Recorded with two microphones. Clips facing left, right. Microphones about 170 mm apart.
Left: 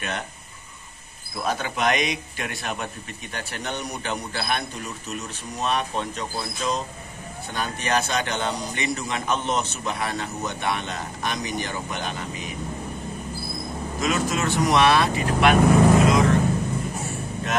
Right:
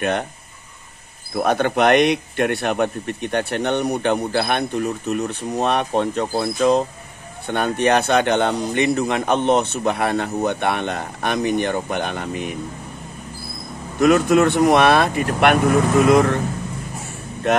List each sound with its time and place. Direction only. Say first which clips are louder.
1.3 s speech: right 9 dB; 60° right (ahead or behind)
13.9 s speech: right 11 dB; 60° right (ahead or behind)